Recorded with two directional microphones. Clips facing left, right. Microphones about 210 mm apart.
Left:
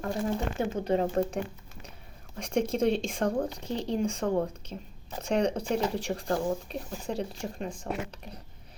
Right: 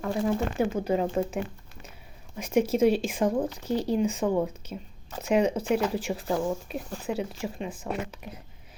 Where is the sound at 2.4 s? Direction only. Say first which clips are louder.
Right 4 dB; 5° right (ahead or behind).